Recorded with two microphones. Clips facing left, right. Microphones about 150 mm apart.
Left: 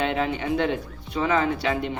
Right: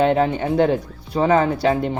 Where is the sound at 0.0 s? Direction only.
40° right (ahead or behind).